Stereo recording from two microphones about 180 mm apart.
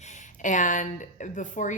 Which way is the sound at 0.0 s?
40° left (ahead or behind).